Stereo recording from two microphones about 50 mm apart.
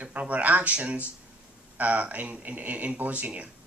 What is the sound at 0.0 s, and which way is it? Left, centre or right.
Speech, right.